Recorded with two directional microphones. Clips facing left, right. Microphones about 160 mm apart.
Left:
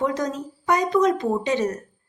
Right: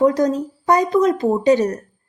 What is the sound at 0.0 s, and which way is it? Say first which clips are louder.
A woman's voice: right 9 dB; 35° right (ahead or behind).